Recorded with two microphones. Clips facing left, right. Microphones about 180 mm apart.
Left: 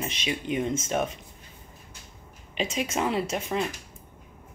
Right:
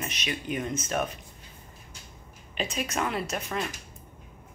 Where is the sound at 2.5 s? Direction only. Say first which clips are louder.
Left 2 dB; 25° left (ahead or behind).